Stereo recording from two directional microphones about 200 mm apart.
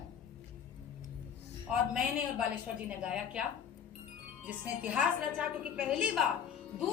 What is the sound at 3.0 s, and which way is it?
Speech, 5° right (ahead or behind).